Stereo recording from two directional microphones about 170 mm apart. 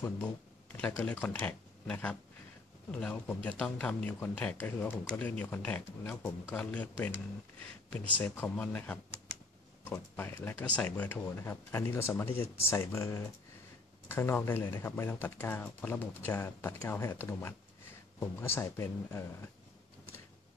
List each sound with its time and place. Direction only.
0.7 s speech: 10° left (ahead or behind)